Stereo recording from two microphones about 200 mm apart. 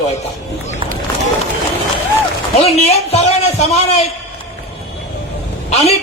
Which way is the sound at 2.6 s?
30° left (ahead or behind).